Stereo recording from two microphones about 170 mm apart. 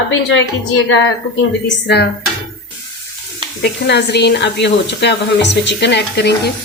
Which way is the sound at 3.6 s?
90° left.